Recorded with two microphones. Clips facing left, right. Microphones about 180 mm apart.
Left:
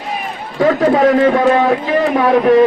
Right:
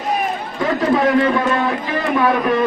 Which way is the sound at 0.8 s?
45° left (ahead or behind).